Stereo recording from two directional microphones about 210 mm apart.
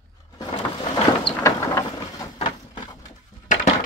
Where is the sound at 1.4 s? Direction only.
15° left (ahead or behind).